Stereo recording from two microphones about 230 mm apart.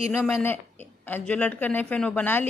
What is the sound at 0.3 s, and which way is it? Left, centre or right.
A woman's voice, centre.